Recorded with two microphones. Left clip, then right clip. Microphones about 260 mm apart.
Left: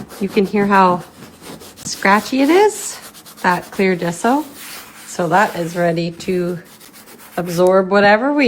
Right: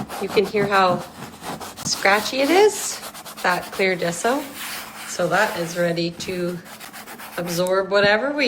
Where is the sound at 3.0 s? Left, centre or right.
Centre.